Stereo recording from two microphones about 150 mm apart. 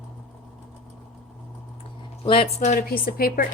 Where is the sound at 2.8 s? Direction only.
75° left (ahead or behind).